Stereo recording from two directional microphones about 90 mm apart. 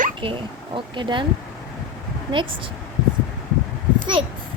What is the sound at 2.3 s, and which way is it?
Speech, 65° right (ahead or behind).